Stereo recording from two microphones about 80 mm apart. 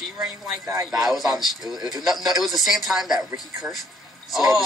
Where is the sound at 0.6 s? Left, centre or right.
Right.